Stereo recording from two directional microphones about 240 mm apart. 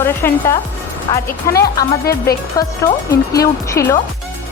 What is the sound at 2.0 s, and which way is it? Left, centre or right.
Speech, left.